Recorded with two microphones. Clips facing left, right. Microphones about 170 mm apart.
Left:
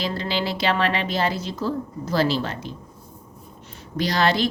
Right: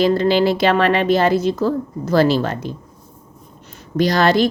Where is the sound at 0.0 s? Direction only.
50° right (ahead or behind).